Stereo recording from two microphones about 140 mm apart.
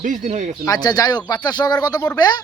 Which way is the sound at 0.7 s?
30° left (ahead or behind).